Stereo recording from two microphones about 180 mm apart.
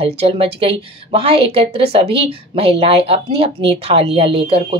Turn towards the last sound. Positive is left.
turn(degrees=-30)  # may be behind; listen again after turning